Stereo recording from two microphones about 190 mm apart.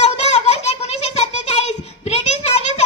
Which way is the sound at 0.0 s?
35° left (ahead or behind).